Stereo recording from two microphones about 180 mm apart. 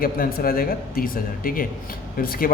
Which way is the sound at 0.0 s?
55° left (ahead or behind).